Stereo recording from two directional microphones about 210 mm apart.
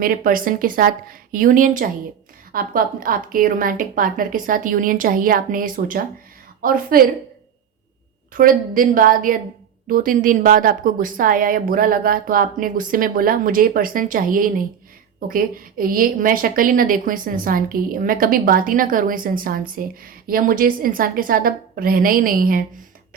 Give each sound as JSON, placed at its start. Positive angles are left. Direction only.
{"t": 0.0, "sound": "a woman's voice", "side_deg": -40}
{"t": 8.3, "sound": "a woman's voice", "side_deg": -40}